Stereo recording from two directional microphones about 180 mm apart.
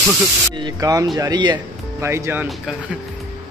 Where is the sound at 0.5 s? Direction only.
20° right (ahead or behind).